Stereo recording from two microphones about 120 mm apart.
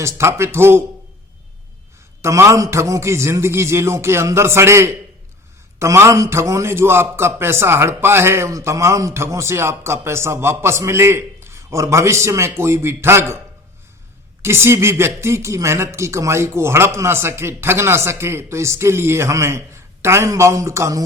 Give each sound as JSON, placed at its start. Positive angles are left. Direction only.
{"t": 0.0, "sound": "a man's voice", "side_deg": -25}
{"t": 2.2, "sound": "a man's voice", "side_deg": -25}
{"t": 14.4, "sound": "a man's voice", "side_deg": -20}